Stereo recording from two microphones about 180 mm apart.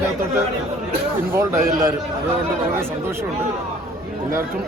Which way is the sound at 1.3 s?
15° right (ahead or behind).